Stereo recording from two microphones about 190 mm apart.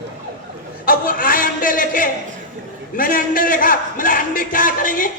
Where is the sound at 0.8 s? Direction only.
50° left (ahead or behind).